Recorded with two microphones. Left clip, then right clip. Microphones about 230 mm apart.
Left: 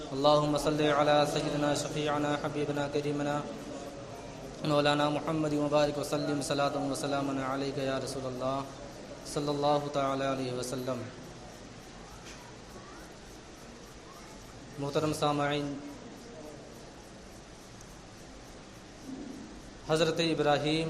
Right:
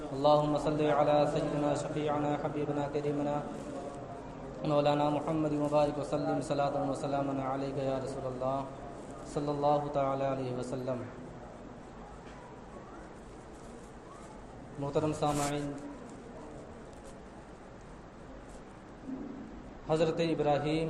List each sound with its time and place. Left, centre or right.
0.2 s a man's voice: left
4.6 s a man's voice: left
14.8 s a man's voice: left
19.9 s a man's voice: left